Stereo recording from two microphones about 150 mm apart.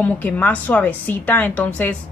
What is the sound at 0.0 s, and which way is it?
A woman's voice, 10° left (ahead or behind).